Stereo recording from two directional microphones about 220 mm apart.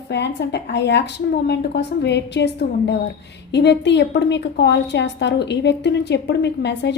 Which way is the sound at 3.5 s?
50° left (ahead or behind).